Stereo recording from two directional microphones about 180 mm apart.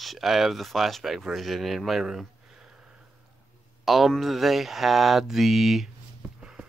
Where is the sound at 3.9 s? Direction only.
Centre (ahead or behind).